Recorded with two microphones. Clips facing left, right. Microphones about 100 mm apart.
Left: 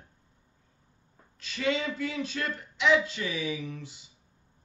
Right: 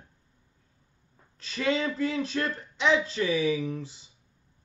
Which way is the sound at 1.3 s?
35° right (ahead or behind).